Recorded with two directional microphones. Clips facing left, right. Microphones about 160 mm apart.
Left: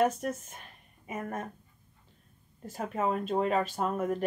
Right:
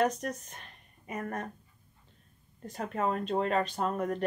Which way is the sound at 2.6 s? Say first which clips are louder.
Left 1 dB; 5° left (ahead or behind).